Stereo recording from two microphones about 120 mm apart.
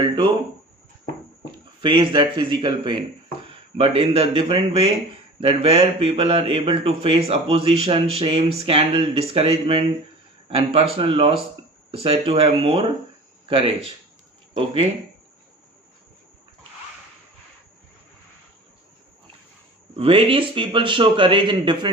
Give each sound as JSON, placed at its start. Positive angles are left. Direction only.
{"t": 1.8, "sound": "speech", "side_deg": -40}
{"t": 14.5, "sound": "speech", "side_deg": -55}
{"t": 20.0, "sound": "speech", "side_deg": -50}